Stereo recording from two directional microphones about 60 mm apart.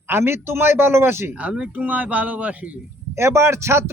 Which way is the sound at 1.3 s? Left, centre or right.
Right.